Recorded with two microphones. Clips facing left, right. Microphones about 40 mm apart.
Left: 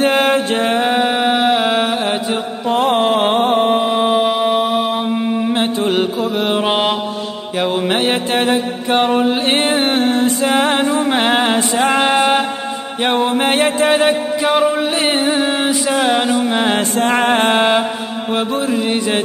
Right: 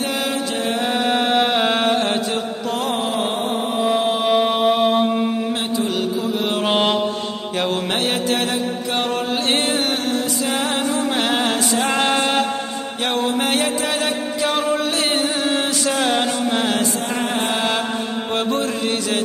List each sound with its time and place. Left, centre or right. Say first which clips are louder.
0.0 s music: left 9 dB; left
0.8 s music: left 4 dB; centre
2.7 s music: left 9 dB; left
3.8 s music: left 4 dB; left
4.3 s mantra: left 1 dB; centre
5.5 s mantra: left 5 dB; left
6.5 s mantra: even; centre
13.0 s music: left 5 dB; left
14.4 s a sound: left 4 dB; centre
16.9 s music: left 8 dB; left
18.3 s mantra: left 4 dB; centre